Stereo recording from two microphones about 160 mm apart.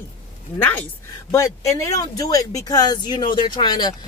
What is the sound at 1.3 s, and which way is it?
Speech, 20° left (ahead or behind).